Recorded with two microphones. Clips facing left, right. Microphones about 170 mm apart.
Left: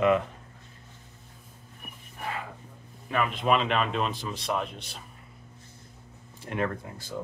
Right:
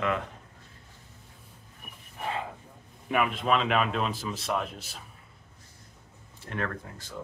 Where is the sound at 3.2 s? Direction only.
Centre (ahead or behind).